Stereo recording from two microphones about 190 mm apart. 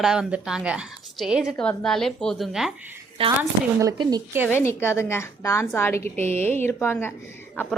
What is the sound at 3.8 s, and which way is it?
Speech, 20° right (ahead or behind).